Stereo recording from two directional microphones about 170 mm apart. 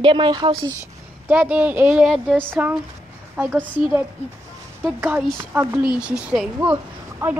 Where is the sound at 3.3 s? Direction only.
10° right (ahead or behind).